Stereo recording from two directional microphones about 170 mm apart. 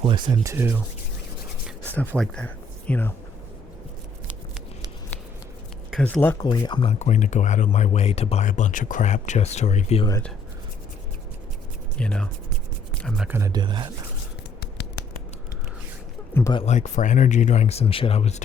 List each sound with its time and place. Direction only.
0.0 s speech: 30° right (ahead or behind)
0.4 s speech: 15° right (ahead or behind)
1.9 s speech: 5° left (ahead or behind)
5.9 s speech: 10° left (ahead or behind)
6.4 s speech: 30° left (ahead or behind)
7.0 s speech: 45° left (ahead or behind)
11.9 s speech: 5° left (ahead or behind)
13.2 s speech: 15° right (ahead or behind)
16.6 s speech: 45° left (ahead or behind)